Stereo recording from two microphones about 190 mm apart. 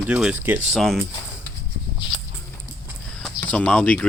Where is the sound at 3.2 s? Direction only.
5° left (ahead or behind).